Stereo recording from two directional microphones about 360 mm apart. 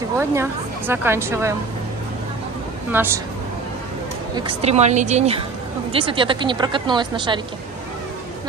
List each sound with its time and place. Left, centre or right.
0.2 s a woman's voice: centre
2.9 s speech: centre
4.4 s a woman's voice: centre